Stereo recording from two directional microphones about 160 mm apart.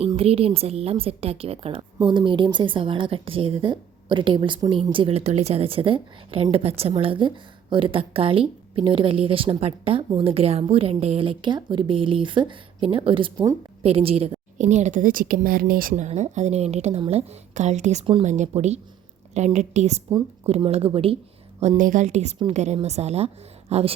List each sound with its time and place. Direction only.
0.1 s a woman's voice: 35° right (ahead or behind)
18.0 s a woman's voice: 35° right (ahead or behind)
18.3 s a woman's voice: 45° right (ahead or behind)
21.6 s a woman's voice: 50° right (ahead or behind)